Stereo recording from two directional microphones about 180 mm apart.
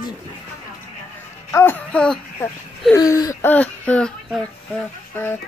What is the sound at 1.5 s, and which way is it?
Speech, 10° left (ahead or behind).